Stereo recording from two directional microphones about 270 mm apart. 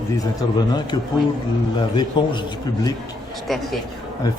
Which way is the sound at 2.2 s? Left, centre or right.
Centre.